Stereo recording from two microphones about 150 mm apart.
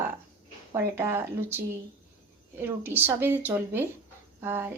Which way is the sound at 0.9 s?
15° right (ahead or behind).